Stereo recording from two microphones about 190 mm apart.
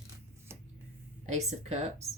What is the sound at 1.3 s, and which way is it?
Speech, 35° right (ahead or behind).